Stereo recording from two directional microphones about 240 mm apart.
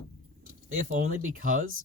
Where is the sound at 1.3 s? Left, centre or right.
Right.